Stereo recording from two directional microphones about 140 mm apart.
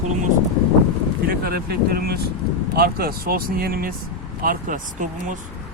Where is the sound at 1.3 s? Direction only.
90° right.